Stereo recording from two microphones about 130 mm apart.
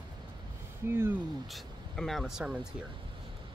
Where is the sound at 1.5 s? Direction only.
Centre (ahead or behind).